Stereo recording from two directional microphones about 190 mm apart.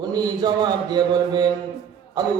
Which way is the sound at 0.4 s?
20° right (ahead or behind).